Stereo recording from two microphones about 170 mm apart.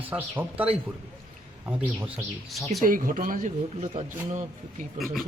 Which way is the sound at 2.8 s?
55° right (ahead or behind).